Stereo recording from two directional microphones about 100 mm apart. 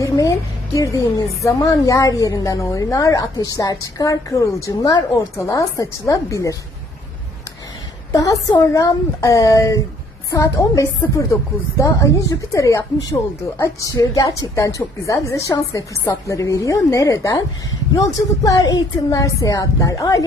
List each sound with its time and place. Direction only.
0.0 s a woman's voice: 35° left (ahead or behind)
8.1 s a woman's voice: 35° left (ahead or behind)